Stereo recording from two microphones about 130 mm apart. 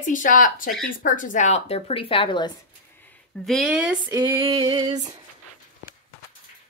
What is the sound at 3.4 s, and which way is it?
Speech, centre (ahead or behind).